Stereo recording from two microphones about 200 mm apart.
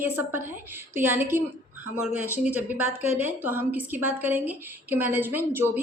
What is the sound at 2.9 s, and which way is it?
Speech, 30° left (ahead or behind).